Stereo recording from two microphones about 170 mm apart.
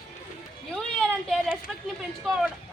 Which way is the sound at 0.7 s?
5° left (ahead or behind).